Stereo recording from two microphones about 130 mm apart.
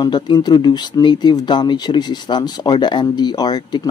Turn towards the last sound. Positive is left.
turn(degrees=30)  # may be behind; listen again after turning